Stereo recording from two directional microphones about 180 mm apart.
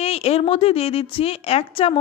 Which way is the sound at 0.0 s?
35° left (ahead or behind).